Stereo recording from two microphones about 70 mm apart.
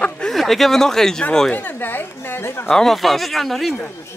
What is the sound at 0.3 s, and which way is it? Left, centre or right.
Speech, centre.